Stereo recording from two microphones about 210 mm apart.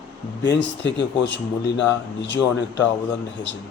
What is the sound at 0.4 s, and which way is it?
Speech, 55° left (ahead or behind).